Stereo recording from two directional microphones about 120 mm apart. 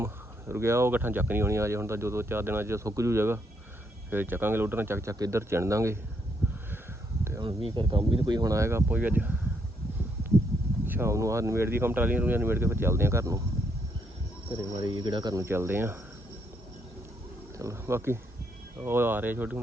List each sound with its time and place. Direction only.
0.0 s speech: 20° right (ahead or behind)
7.4 s speech: 45° right (ahead or behind); by 8.8 s 25° right (ahead or behind)
8.9 s speech: 15° right (ahead or behind)
10.8 s speech: 20° right (ahead or behind)
14.5 s speech: 40° right (ahead or behind)
15.4 s speech: 20° right (ahead or behind)
17.6 s speech: 25° right (ahead or behind)